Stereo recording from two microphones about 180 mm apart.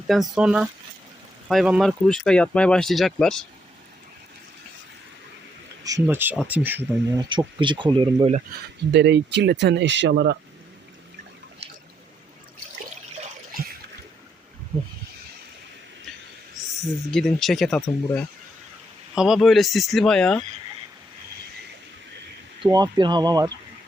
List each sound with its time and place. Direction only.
0.1 s speech: 5° right (ahead or behind)
5.8 s speech: 15° right (ahead or behind)
7.2 s speech: 25° right (ahead or behind)
8.9 s speech: 75° right (ahead or behind)
16.8 s speech: centre (ahead or behind)
22.6 s speech: 25° right (ahead or behind)